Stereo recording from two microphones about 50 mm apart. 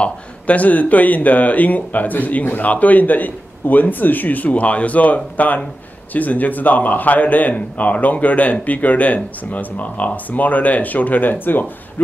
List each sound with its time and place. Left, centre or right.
0.0 s speech: left